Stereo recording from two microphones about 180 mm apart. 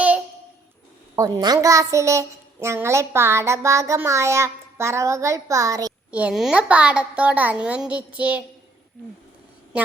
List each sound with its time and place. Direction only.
1.1 s a child's voice: 20° right (ahead or behind)
6.1 s a child's voice: 5° right (ahead or behind)
9.7 s a woman's voice: 5° right (ahead or behind)